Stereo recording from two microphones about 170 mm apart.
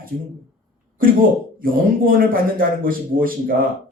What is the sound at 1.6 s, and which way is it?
A man's voice, 55° right (ahead or behind).